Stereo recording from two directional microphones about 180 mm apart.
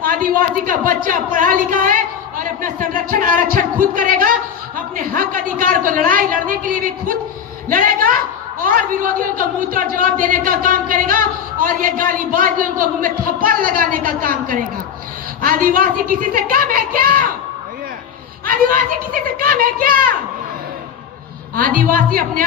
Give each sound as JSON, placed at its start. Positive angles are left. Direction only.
{"t": 0.0, "sound": "a woman's voice", "side_deg": -50}
{"t": 19.4, "sound": "a woman's voice", "side_deg": -55}
{"t": 21.5, "sound": "a woman's voice", "side_deg": -50}